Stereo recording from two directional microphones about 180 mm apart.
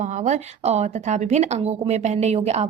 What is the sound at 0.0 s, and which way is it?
Speech, 40° right (ahead or behind).